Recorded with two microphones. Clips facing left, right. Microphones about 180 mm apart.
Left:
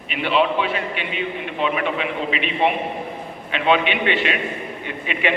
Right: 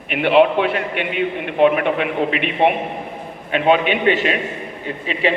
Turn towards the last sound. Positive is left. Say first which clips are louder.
# right 2 dB
turn(degrees=-35)  # may be behind; listen again after turning